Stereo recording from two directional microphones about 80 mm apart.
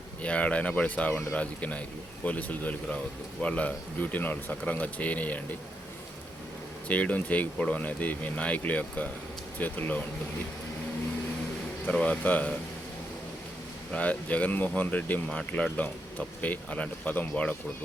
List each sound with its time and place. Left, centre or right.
0.2 s speech: centre
6.8 s speech: centre
11.9 s speech: centre
13.9 s speech: centre
15.3 s speech: centre